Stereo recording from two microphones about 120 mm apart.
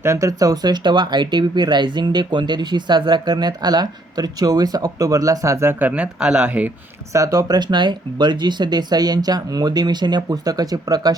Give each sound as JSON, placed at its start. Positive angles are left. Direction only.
{"t": 0.0, "sound": "speech", "side_deg": -25}
{"t": 7.1, "sound": "speech", "side_deg": -30}